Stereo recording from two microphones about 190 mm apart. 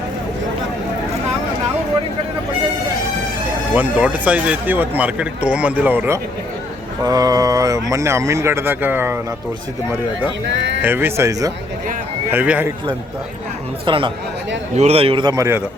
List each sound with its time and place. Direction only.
3.8 s speech: 10° right (ahead or behind)
10.4 s speech: 70° right (ahead or behind)
10.8 s speech: 10° right (ahead or behind)
13.8 s a man's voice: 25° right (ahead or behind)